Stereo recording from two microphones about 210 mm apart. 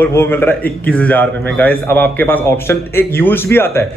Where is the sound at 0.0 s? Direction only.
10° left (ahead or behind).